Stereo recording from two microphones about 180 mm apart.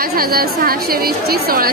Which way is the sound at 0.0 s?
55° right (ahead or behind).